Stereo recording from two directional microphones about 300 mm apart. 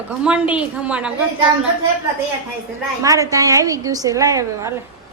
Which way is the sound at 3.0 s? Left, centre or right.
Centre.